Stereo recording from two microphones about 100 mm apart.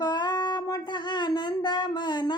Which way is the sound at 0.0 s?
45° left (ahead or behind).